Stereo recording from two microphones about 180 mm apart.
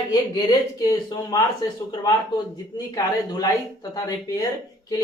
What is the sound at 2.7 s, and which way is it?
A man's voice, 20° left (ahead or behind).